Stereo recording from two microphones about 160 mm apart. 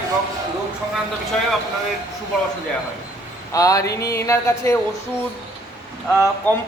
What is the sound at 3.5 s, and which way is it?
Speech, 20° left (ahead or behind).